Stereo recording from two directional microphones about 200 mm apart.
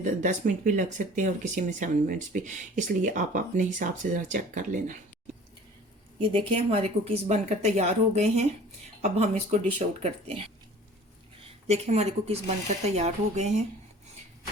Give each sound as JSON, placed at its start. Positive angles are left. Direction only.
{"t": 0.0, "sound": "speech", "side_deg": -40}
{"t": 6.1, "sound": "speech", "side_deg": -25}
{"t": 11.4, "sound": "speech", "side_deg": -30}